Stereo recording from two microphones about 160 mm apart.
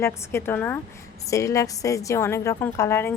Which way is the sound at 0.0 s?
15° left (ahead or behind).